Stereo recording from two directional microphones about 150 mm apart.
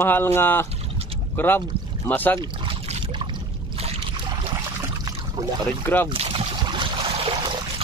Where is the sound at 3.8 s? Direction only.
45° right (ahead or behind).